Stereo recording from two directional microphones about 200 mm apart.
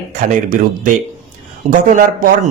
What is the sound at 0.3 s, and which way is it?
Speech, 40° right (ahead or behind).